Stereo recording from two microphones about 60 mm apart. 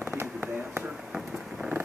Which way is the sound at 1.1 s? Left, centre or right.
Centre.